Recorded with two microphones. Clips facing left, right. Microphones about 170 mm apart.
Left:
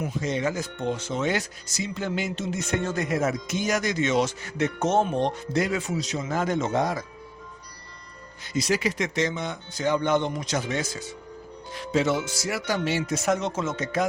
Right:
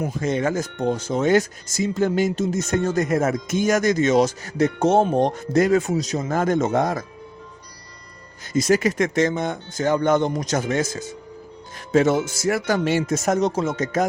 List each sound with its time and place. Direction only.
0.0 s speech: 50° right (ahead or behind)
8.5 s speech: 45° right (ahead or behind)